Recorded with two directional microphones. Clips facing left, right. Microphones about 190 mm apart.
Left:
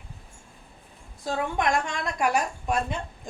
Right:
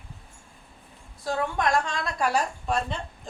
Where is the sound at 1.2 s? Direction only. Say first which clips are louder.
Even; 20° left (ahead or behind).